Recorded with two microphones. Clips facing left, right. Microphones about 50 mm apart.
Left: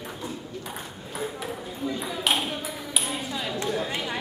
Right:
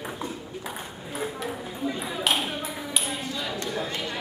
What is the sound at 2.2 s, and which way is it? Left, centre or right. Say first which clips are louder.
Clapping: even; centre.